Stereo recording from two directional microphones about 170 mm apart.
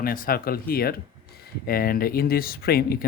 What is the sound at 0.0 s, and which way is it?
Speech, 60° left (ahead or behind).